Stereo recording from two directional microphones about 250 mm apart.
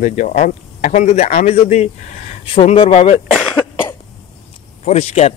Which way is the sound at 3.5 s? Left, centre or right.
Centre.